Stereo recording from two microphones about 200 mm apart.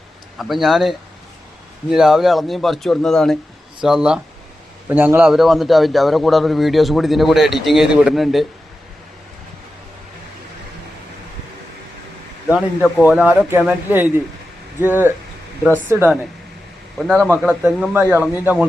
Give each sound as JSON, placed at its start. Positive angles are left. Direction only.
{"t": 0.3, "sound": "a man's voice", "side_deg": 0}
{"t": 12.5, "sound": "a man's voice", "side_deg": -5}
{"t": 17.0, "sound": "a man's voice", "side_deg": 0}